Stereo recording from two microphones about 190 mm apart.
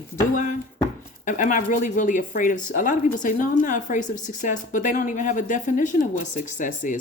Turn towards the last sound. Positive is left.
turn(degrees=45)  # may be behind; listen again after turning